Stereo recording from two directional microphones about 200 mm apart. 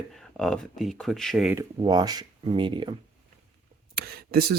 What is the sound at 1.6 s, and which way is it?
Speech, 20° right (ahead or behind).